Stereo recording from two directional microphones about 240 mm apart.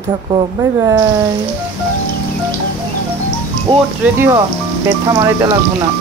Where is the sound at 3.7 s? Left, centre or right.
Right.